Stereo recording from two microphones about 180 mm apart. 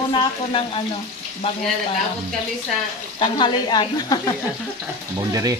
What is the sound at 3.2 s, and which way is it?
Speech, 25° left (ahead or behind).